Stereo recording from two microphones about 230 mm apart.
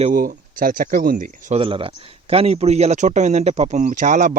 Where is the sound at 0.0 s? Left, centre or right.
Right.